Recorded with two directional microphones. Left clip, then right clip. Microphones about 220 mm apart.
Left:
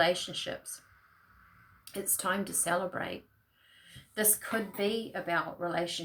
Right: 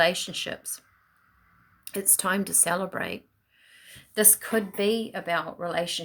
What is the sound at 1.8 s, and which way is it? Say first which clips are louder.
Speech: right 6 dB; 50° right (ahead or behind).